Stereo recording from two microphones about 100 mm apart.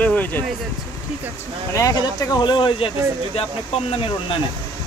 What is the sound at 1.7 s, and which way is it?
Speech, 40° left (ahead or behind).